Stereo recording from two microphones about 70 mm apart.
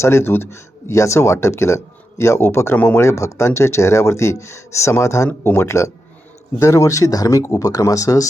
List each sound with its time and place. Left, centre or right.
0.0 s speech: left
2.7 s speech: left
3.0 s speech: left
5.3 s speech: left
5.6 s speech: left